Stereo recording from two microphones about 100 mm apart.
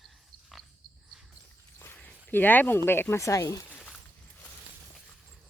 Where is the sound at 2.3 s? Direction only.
20° left (ahead or behind); by 3.6 s 35° left (ahead or behind).